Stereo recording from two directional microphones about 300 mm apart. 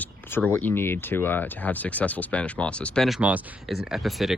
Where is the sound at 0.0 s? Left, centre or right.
Centre.